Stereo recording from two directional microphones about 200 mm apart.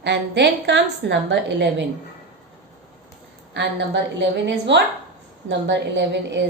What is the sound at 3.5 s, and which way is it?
A woman's voice, 60° right (ahead or behind).